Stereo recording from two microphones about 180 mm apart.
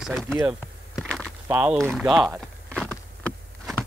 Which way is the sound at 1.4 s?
10° right (ahead or behind).